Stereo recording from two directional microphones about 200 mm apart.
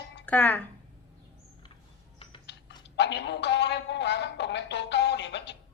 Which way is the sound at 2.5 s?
60° left (ahead or behind).